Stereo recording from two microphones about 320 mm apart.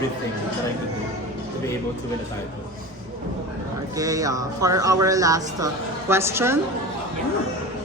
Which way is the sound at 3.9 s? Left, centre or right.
Centre.